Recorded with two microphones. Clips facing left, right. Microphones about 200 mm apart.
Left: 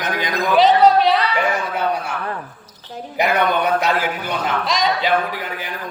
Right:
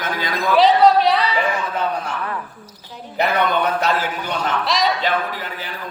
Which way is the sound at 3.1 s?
10° left (ahead or behind).